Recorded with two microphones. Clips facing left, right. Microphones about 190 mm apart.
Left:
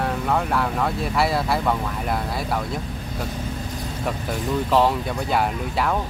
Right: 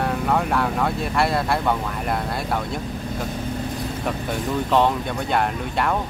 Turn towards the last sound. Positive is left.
turn(degrees=0)  # may be behind; listen again after turning